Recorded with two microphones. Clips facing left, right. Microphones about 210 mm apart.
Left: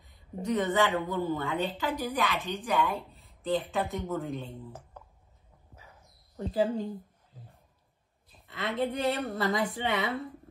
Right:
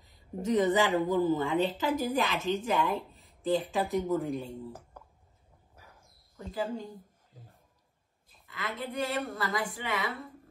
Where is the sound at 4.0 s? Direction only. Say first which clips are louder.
Right 4 dB; 15° right (ahead or behind).